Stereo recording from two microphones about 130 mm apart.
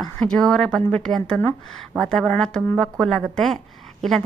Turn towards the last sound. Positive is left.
turn(degrees=0)  # may be behind; listen again after turning